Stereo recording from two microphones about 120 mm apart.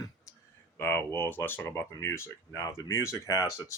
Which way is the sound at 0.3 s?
25° left (ahead or behind).